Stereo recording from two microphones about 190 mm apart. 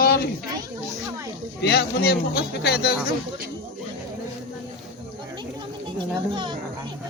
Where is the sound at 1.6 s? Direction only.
55° left (ahead or behind).